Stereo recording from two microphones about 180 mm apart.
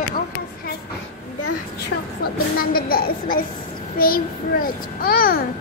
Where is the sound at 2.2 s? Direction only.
55° left (ahead or behind).